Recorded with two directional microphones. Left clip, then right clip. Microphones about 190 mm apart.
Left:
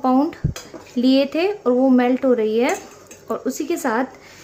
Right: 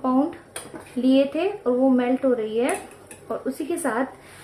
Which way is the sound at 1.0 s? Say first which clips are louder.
Left 3 dB; 35° left (ahead or behind).